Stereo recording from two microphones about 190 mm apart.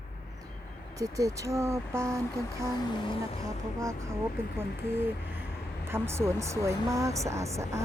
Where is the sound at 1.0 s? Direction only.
15° right (ahead or behind).